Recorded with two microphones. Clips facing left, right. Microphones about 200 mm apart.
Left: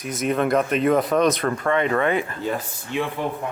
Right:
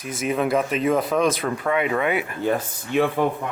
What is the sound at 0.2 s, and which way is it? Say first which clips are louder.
Speech: left 1 dB; 5° right (ahead or behind).